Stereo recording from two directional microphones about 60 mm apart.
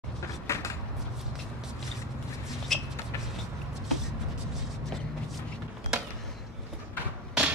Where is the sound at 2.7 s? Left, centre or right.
Centre.